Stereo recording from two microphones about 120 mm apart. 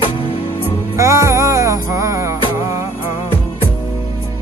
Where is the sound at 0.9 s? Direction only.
25° right (ahead or behind).